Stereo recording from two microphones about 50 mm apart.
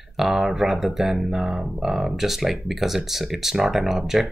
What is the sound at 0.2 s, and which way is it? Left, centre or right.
Speech, centre.